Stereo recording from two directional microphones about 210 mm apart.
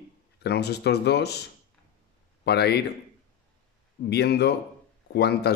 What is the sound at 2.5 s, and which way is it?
Speech, 50° left (ahead or behind).